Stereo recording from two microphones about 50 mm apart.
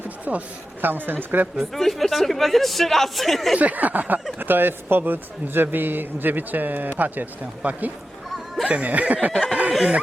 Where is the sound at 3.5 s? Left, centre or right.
Right.